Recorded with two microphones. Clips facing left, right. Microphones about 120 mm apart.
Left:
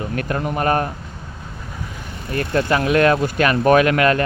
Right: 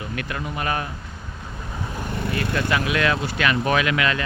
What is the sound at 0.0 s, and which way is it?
Speech, 40° left (ahead or behind).